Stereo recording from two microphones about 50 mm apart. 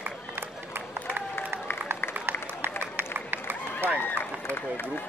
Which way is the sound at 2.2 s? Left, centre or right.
Right.